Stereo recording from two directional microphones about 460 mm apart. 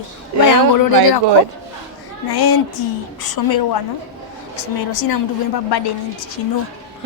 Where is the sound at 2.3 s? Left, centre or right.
Left.